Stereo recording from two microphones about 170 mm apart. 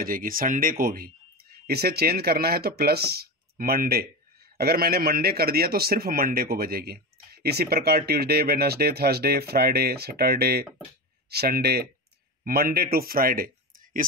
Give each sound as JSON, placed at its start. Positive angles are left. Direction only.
{"t": 0.0, "sound": "a man's voice", "side_deg": -55}